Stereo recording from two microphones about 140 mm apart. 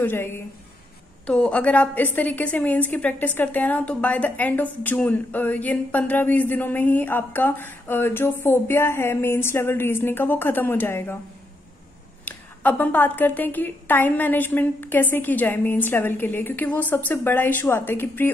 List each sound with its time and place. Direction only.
0.0 s a woman's voice: 15° left (ahead or behind)
12.3 s a woman's voice: 10° left (ahead or behind)